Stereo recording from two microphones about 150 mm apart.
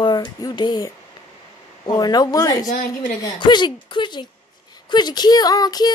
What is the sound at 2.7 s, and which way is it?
Speech, 65° left (ahead or behind).